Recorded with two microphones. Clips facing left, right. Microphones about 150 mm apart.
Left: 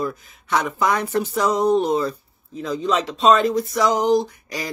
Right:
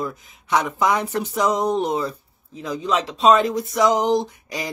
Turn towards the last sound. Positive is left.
turn(degrees=-20)  # may be behind; listen again after turning